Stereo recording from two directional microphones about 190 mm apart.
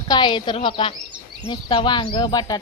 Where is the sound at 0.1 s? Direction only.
25° left (ahead or behind).